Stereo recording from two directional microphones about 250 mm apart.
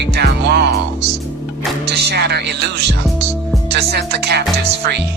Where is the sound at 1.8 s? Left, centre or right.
Right.